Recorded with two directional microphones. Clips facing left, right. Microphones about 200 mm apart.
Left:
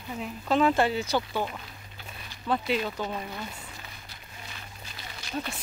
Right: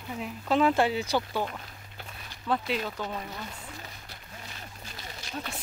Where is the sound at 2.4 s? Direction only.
Centre (ahead or behind).